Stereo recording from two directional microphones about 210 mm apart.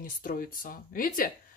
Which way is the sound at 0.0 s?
40° left (ahead or behind).